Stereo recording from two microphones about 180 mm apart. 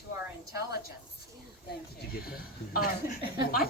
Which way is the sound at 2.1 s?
55° left (ahead or behind).